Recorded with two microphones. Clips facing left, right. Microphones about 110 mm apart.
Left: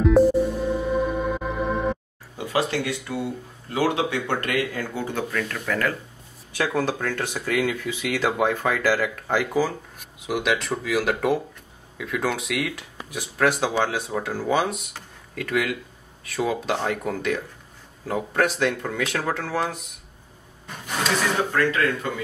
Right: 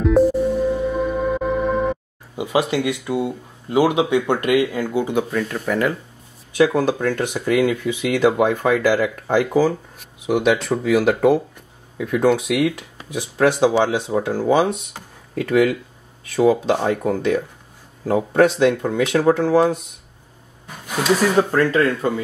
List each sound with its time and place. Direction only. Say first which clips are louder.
0.0 s music: right 1 dB; centre (ahead or behind)
2.3 s speech: right 5 dB; 15° right (ahead or behind)
12.4 s speech: right 8 dB; 25° right (ahead or behind)
18.0 s speech: right 8 dB; 25° right (ahead or behind)
20.6 s a sound: right 6 dB; 5° right (ahead or behind)
21.5 s speech: right 5 dB; 30° right (ahead or behind)